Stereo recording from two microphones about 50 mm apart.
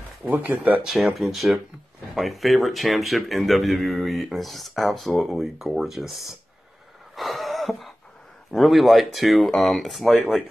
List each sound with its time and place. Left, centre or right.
0.3 s speech: right
0.8 s speech: centre
7.2 s a sound: centre
8.5 s speech: centre